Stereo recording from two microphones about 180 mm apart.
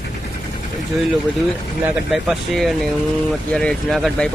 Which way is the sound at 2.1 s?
Centre (ahead or behind).